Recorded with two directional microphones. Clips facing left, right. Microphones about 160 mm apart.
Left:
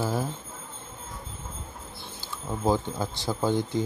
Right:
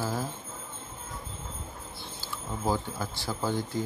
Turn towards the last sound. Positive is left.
turn(degrees=20)  # may be behind; listen again after turning